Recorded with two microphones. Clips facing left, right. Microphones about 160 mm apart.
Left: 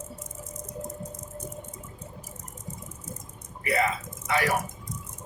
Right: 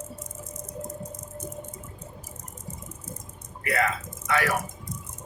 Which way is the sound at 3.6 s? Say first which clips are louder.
Even; 20° left (ahead or behind).